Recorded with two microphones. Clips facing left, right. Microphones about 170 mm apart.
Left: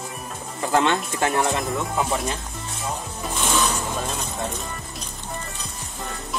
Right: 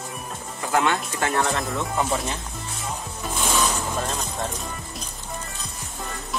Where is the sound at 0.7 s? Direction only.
25° left (ahead or behind).